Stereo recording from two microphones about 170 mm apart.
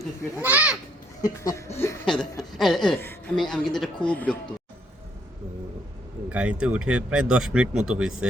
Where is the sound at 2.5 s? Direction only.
Centre (ahead or behind).